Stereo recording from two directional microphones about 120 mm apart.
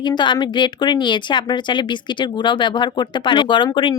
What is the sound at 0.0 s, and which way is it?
A woman's voice, 40° left (ahead or behind).